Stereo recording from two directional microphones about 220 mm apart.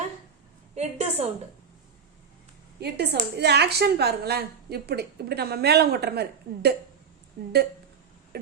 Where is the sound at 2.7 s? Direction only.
50° right (ahead or behind).